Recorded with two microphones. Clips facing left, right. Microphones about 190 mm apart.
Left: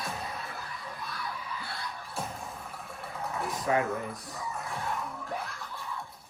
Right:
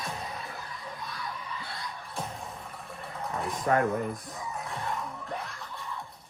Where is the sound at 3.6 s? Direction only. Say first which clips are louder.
Right 3 dB; 50° right (ahead or behind).